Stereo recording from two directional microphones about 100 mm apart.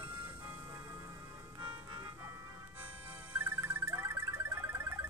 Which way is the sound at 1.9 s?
35° right (ahead or behind).